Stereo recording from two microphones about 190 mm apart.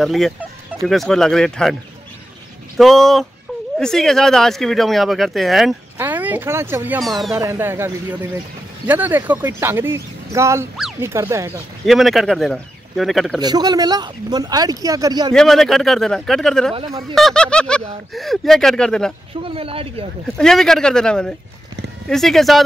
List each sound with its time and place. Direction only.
0.0 s speech: centre (ahead or behind)
2.8 s speech: centre (ahead or behind)
7.0 s speech: centre (ahead or behind)
7.3 s speech: 15° right (ahead or behind)
11.8 s speech: centre (ahead or behind)
13.4 s speech: 20° right (ahead or behind)
15.3 s speech: centre (ahead or behind)
19.4 s speech: 30° right (ahead or behind)
20.2 s speech: centre (ahead or behind)